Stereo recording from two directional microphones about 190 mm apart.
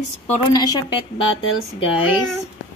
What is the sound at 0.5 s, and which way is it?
Speech, 20° left (ahead or behind).